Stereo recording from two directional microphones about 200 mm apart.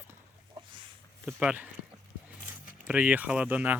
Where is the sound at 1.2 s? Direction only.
5° right (ahead or behind).